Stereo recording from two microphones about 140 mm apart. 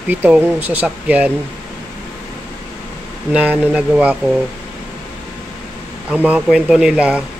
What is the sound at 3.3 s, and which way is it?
Speech, 10° right (ahead or behind).